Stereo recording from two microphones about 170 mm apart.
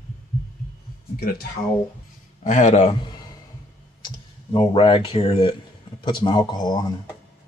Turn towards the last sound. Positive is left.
turn(degrees=25)  # may be behind; listen again after turning